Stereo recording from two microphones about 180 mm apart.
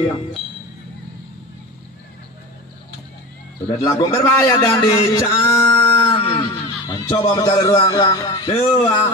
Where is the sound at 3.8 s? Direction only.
20° left (ahead or behind).